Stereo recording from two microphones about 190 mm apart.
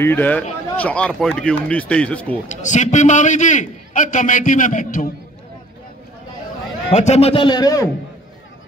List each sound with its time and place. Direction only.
0.0 s speech: 10° left (ahead or behind)
2.4 s a man's voice: 40° left (ahead or behind)
6.9 s a man's voice: 35° left (ahead or behind); by 7.9 s 20° left (ahead or behind)